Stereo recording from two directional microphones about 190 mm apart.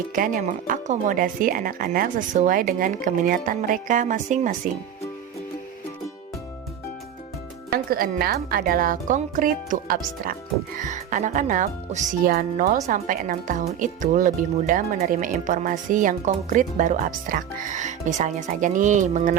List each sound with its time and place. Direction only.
0.1 s speech: 45° right (ahead or behind)
7.7 s speech: 50° right (ahead or behind)